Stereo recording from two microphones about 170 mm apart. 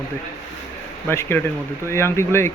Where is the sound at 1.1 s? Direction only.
15° left (ahead or behind).